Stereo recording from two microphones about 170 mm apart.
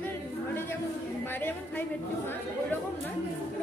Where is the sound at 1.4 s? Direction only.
10° left (ahead or behind).